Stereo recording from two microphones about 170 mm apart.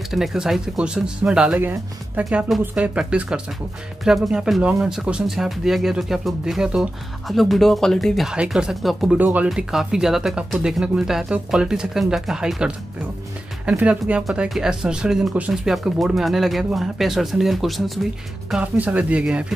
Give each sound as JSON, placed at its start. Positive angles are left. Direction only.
{"t": 0.1, "sound": "speech", "side_deg": 0}